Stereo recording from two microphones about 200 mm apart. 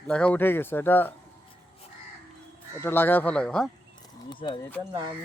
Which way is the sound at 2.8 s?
10° left (ahead or behind).